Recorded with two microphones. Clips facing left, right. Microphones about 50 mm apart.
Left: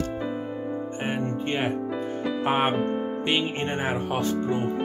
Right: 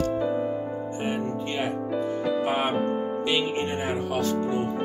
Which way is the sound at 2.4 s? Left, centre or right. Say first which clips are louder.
Left 5 dB; left.